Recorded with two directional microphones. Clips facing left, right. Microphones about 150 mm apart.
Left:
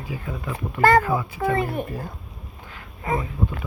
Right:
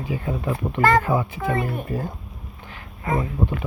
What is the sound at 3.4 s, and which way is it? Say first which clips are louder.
Speech: right 2 dB; 30° right (ahead or behind).